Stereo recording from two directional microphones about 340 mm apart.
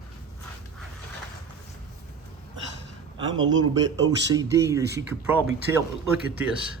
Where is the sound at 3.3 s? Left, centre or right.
Right.